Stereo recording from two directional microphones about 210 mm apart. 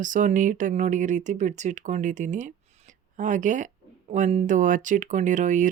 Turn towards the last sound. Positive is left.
turn(degrees=-35)  # may be behind; listen again after turning